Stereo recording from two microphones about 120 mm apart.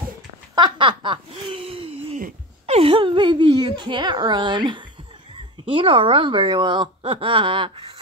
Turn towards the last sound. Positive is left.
turn(degrees=-45)  # may be behind; listen again after turning